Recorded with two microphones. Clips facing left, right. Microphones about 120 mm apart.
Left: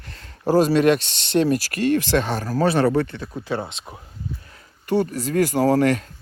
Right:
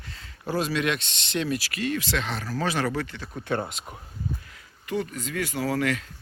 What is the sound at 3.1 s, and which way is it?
Speech, 15° left (ahead or behind).